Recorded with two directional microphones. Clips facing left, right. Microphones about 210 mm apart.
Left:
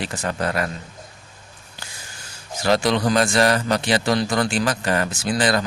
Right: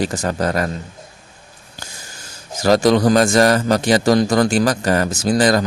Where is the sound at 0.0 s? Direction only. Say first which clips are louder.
Right 5 dB; 40° right (ahead or behind).